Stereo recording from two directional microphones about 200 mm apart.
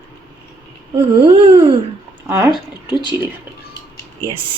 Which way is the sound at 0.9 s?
25° right (ahead or behind).